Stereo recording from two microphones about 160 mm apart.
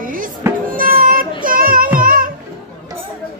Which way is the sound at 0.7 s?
60° right (ahead or behind).